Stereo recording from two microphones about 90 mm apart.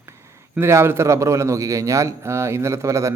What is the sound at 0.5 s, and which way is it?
A man's voice, 30° right (ahead or behind).